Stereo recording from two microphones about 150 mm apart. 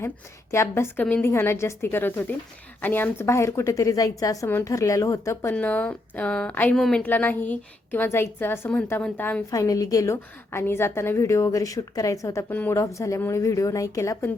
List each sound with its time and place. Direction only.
0.5 s a woman's voice: 20° left (ahead or behind)
9.5 s a woman's voice: 20° left (ahead or behind)